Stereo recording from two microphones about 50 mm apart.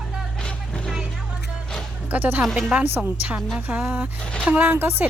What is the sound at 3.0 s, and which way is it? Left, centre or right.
Speech, right.